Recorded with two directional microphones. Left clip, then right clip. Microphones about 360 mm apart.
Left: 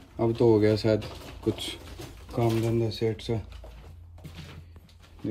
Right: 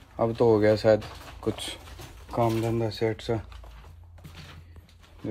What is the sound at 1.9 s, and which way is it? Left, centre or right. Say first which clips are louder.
Speech: right 6 dB; right.